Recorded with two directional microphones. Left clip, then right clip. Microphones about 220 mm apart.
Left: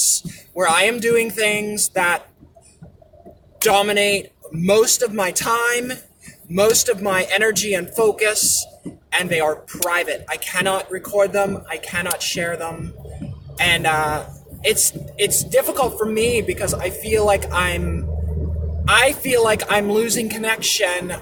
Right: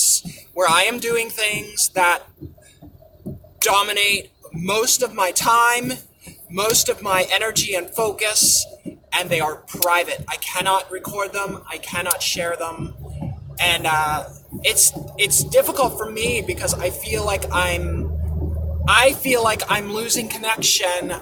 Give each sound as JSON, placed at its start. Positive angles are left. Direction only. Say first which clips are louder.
{"t": 0.5, "sound": "speech", "louder": "even", "side_deg": 15}
{"t": 3.6, "sound": "speech", "louder": "left 2 dB", "side_deg": 15}
{"t": 18.9, "sound": "speech", "louder": "even", "side_deg": 15}